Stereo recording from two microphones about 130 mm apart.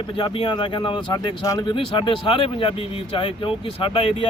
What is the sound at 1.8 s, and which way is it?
Speech, 40° left (ahead or behind).